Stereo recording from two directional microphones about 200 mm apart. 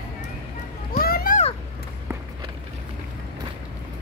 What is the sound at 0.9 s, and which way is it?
Music, 50° left (ahead or behind).